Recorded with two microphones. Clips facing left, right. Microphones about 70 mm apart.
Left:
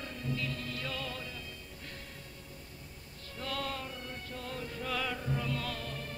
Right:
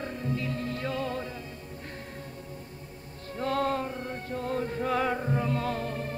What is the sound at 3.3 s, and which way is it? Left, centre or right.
Music, right.